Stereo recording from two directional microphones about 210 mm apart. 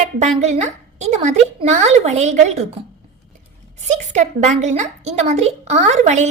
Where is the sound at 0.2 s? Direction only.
35° right (ahead or behind).